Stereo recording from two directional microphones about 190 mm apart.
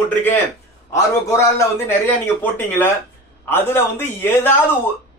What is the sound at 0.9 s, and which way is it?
Speech, 15° left (ahead or behind).